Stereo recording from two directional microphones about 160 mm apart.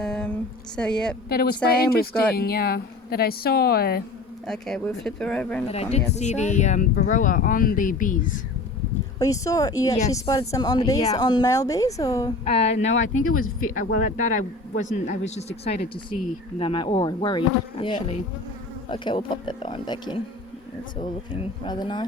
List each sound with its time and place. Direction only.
0.0 s a sound: 5° left (ahead or behind)
0.8 s speech: 5° left (ahead or behind)
1.3 s speech: 75° left (ahead or behind)
4.4 s speech: centre (ahead or behind)
5.6 s speech: 40° left (ahead or behind); by 8.2 s 55° left (ahead or behind)
9.1 s speech: 20° left (ahead or behind)
12.5 s speech: 40° left (ahead or behind)
13.6 s speech: 60° left (ahead or behind); by 15.7 s 40° left (ahead or behind)
16.6 s speech: 30° left (ahead or behind)